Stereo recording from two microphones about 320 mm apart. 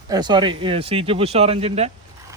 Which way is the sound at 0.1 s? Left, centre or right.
Centre.